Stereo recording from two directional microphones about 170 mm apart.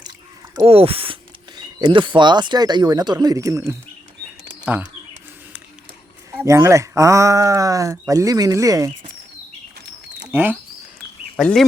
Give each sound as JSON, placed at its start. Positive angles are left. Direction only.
{"t": 0.6, "sound": "speech", "side_deg": -35}
{"t": 6.3, "sound": "speech", "side_deg": -15}
{"t": 10.2, "sound": "speech", "side_deg": -10}
{"t": 11.3, "sound": "speech", "side_deg": 5}